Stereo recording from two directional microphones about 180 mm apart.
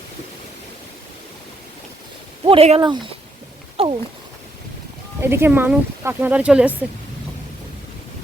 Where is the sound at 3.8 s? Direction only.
30° right (ahead or behind).